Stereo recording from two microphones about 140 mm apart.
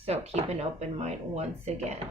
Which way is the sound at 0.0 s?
50° right (ahead or behind).